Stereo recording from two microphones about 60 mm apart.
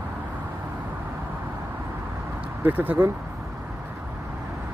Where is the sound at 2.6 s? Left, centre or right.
Right.